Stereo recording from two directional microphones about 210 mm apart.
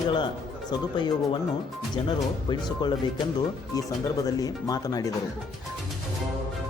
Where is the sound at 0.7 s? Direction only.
20° left (ahead or behind).